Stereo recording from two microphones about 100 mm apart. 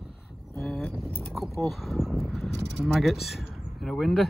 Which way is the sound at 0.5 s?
5° left (ahead or behind).